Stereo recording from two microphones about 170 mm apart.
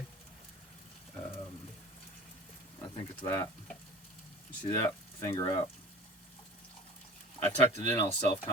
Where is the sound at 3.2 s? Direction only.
15° left (ahead or behind).